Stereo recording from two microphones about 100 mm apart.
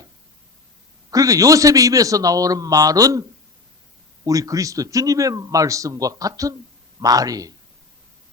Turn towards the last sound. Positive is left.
turn(degrees=-35)  # may be behind; listen again after turning